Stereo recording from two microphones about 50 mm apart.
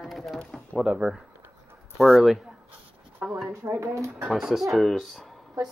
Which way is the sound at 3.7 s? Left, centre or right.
Right.